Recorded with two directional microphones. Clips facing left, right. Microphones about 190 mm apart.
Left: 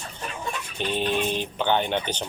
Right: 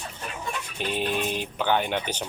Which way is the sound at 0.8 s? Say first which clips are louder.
Left 2 dB; 5° right (ahead or behind).